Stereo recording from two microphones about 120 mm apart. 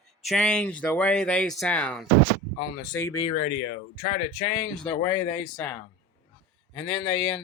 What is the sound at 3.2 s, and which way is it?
Speech, 90° left.